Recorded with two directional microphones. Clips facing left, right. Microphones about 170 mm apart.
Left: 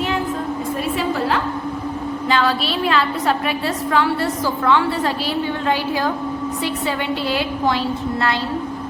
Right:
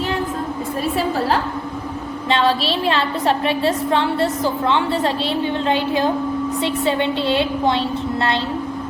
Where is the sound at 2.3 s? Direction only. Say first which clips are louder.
Right 2 dB; 30° right (ahead or behind).